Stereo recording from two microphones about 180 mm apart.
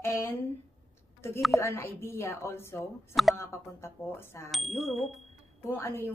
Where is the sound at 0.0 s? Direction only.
15° left (ahead or behind).